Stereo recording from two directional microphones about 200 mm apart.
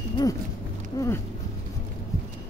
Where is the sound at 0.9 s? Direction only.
15° left (ahead or behind).